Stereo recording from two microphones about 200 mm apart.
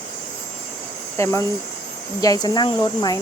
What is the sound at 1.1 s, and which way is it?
Speech, 15° left (ahead or behind).